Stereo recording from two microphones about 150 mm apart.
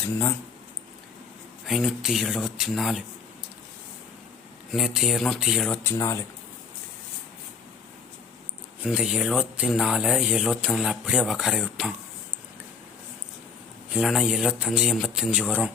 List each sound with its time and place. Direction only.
1.6 s speech: centre (ahead or behind)
4.7 s speech: centre (ahead or behind)
5.7 s speech: 15° left (ahead or behind)
8.8 s speech: 5° right (ahead or behind)
13.9 s speech: 5° right (ahead or behind)